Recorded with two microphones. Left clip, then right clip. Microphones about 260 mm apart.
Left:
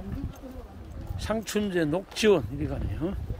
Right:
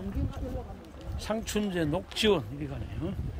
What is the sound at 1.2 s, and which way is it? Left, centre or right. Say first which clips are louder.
Speech: left 3 dB; centre.